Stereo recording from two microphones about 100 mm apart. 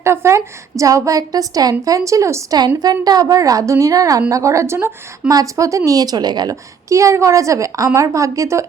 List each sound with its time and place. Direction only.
0.0 s a woman's voice: 25° right (ahead or behind)
2.6 s a woman's voice: 45° right (ahead or behind)